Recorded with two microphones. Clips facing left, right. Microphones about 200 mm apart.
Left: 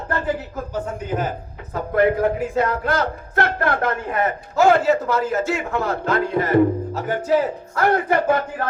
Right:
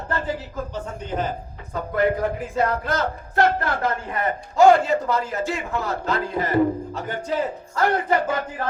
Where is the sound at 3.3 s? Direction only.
55° left (ahead or behind).